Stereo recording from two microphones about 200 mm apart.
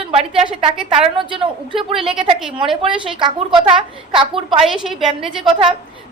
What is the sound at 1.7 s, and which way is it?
Speech, centre (ahead or behind).